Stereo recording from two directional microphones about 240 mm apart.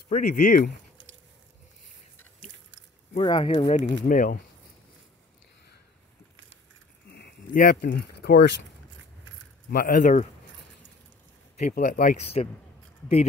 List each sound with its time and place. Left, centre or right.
0.1 s speech: left
3.2 s speech: left
7.1 s speech: left
9.7 s speech: left
11.5 s speech: left